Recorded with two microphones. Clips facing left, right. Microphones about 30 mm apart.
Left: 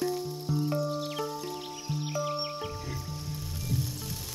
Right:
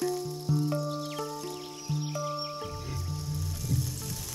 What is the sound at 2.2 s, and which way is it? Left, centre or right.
Music, left.